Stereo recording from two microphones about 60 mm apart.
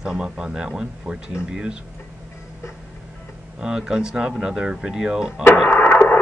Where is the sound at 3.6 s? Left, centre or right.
Centre.